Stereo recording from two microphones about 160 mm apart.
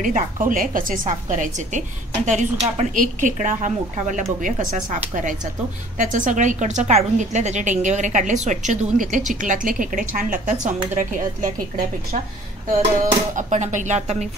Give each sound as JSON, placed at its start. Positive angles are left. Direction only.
{"t": 0.0, "sound": "a woman's voice", "side_deg": -55}
{"t": 13.3, "sound": "a woman's voice", "side_deg": -50}